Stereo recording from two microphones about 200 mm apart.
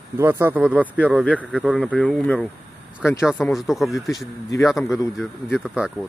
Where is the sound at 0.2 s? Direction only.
10° right (ahead or behind).